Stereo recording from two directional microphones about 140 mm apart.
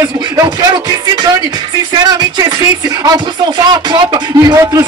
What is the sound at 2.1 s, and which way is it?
Speech, 30° right (ahead or behind).